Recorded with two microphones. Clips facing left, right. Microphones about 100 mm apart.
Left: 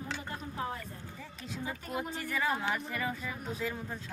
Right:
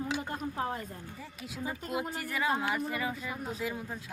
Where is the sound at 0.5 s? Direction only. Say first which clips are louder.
Right 1 dB; 35° right (ahead or behind).